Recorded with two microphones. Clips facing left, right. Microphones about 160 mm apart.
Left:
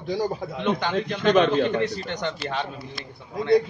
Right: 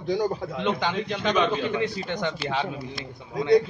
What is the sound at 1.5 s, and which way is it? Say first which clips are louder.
Speech: left 5 dB; 60° left (ahead or behind).